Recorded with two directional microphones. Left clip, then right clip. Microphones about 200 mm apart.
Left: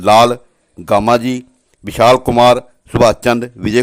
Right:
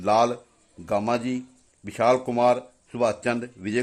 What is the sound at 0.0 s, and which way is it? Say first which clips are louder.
A man's voice: left 12 dB; 30° left (ahead or behind).